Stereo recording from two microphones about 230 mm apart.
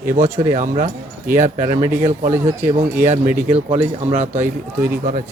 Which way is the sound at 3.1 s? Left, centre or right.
Right.